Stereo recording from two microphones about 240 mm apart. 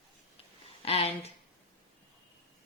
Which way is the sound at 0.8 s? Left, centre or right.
Left.